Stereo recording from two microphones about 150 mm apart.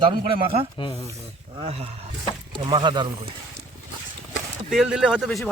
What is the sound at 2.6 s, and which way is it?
Speech, 30° right (ahead or behind).